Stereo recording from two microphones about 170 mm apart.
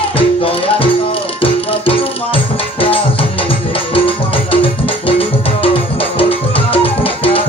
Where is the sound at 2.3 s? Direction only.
35° left (ahead or behind).